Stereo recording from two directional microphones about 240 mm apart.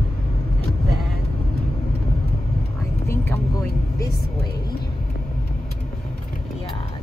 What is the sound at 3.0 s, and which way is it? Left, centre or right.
Vehicle, centre.